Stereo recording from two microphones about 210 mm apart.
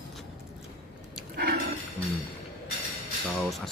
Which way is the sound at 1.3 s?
50° right (ahead or behind).